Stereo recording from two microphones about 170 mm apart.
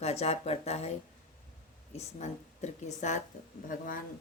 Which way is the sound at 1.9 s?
40° left (ahead or behind).